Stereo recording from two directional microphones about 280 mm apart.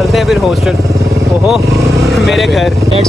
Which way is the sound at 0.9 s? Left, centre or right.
Centre.